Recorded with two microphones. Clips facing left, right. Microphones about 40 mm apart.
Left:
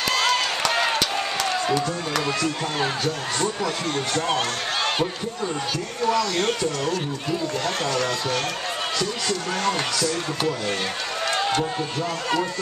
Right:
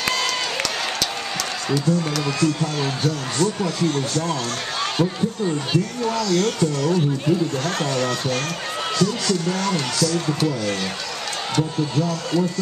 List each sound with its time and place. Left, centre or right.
1.7 s a man's voice: centre
2.6 s speech: left
6.2 s a man's voice: left
8.9 s speech: left